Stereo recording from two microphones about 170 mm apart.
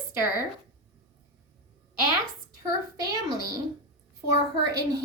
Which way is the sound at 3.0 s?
20° right (ahead or behind).